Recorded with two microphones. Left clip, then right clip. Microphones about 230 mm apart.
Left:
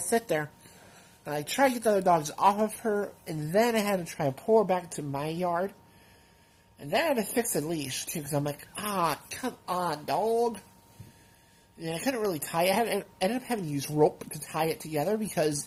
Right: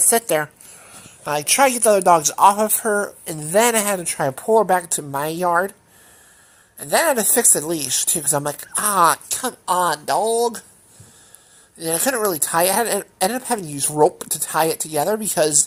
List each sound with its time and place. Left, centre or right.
0.1 s speech: centre
6.9 s speech: right
11.8 s speech: right